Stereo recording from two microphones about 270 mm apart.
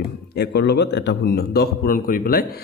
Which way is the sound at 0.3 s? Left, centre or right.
Left.